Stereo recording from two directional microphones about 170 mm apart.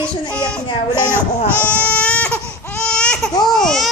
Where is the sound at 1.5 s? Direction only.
10° left (ahead or behind).